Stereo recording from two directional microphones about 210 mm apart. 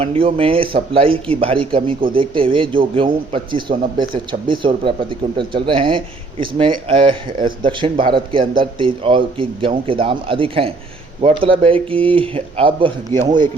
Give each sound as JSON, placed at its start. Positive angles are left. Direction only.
{"t": 0.0, "sound": "speech", "side_deg": -25}